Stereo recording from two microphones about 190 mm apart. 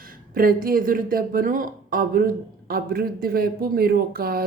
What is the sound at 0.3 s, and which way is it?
Speech, 50° right (ahead or behind).